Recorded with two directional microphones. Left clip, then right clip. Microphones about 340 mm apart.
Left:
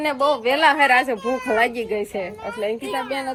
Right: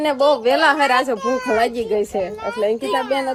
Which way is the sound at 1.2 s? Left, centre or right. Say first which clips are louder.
Right 2 dB; right.